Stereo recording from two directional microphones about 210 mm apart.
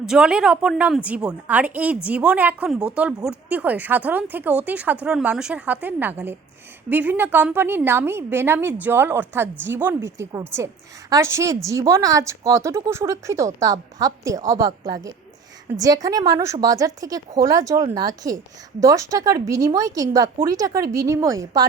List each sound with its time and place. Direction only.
0.0 s a woman's voice: 5° right (ahead or behind)